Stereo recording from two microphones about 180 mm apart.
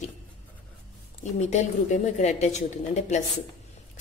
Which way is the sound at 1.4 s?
40° left (ahead or behind).